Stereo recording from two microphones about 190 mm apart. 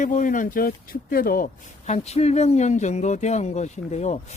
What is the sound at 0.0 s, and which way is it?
Speech, 40° left (ahead or behind).